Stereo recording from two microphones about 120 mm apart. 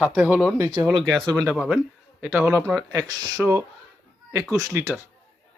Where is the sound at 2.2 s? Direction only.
15° right (ahead or behind).